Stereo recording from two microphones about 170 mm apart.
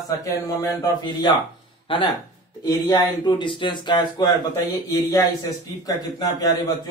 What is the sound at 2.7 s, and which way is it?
Speech, 25° left (ahead or behind).